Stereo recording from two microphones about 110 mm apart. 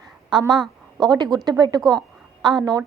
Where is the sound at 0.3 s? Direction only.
45° right (ahead or behind).